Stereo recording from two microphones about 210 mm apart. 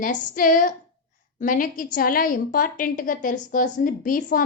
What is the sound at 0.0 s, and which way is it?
A woman's voice, 40° left (ahead or behind).